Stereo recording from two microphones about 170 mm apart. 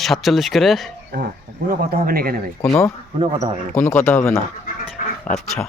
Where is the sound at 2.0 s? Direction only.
60° right (ahead or behind).